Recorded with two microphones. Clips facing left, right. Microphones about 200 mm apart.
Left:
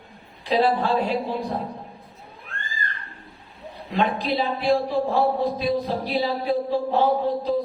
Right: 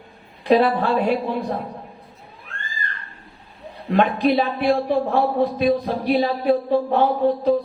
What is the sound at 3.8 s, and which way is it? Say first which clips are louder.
Speech: right 6 dB; 60° right (ahead or behind).